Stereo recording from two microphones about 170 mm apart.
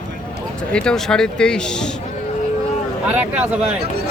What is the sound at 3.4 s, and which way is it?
Speech, 5° right (ahead or behind).